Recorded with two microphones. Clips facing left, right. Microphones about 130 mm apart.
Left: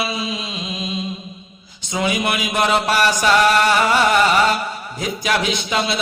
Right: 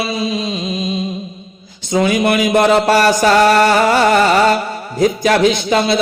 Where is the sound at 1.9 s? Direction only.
45° right (ahead or behind).